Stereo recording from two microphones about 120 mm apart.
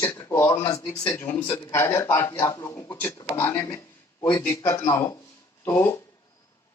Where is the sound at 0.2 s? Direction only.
25° left (ahead or behind).